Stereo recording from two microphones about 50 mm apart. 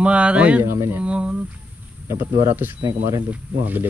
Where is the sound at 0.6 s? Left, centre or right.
Right.